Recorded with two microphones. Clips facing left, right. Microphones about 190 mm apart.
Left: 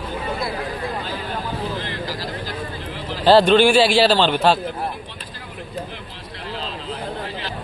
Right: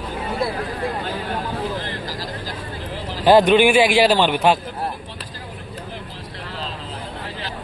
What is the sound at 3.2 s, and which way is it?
A man's voice, 15° right (ahead or behind).